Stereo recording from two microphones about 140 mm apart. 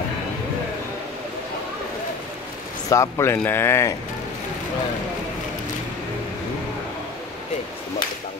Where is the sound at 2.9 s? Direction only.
20° left (ahead or behind).